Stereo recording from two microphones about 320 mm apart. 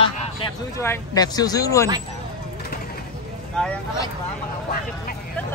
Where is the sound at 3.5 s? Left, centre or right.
Centre.